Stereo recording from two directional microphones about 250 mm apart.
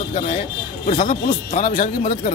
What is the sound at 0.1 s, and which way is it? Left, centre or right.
Speech, left.